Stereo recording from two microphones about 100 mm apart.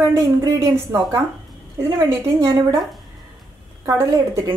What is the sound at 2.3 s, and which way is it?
Speech, 30° right (ahead or behind).